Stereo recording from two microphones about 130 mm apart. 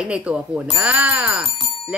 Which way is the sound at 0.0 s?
10° right (ahead or behind).